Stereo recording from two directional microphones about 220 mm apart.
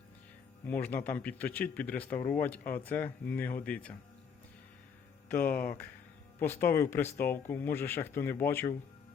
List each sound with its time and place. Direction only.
0.6 s speech: 10° left (ahead or behind)
5.4 s speech: 40° left (ahead or behind)
5.6 s speech: 10° left (ahead or behind)